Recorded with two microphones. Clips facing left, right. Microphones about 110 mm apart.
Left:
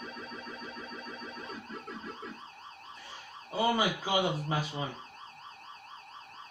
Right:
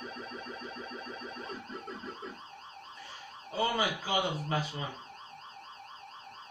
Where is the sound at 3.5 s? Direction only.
15° left (ahead or behind).